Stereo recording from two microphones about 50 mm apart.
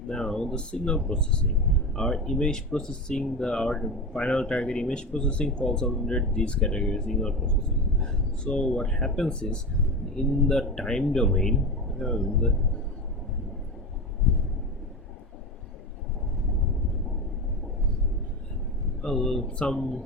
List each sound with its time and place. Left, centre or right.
0.1 s speech: centre
2.0 s speech: centre
19.0 s speech: centre
19.5 s speech: left
19.7 s speech: centre